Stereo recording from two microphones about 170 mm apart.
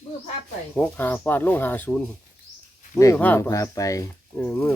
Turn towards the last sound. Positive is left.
turn(degrees=10)  # may be behind; listen again after turning